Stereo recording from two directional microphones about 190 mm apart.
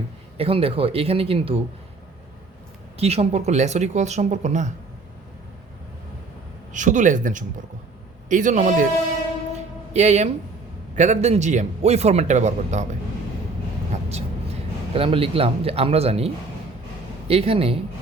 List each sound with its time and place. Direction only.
0.3 s speech: 30° right (ahead or behind)
3.0 s speech: 35° right (ahead or behind)
6.7 s speech: 40° right (ahead or behind)
9.9 s speech: 35° right (ahead or behind)
13.9 s vehicle: 35° right (ahead or behind)
14.9 s speech: 30° right (ahead or behind)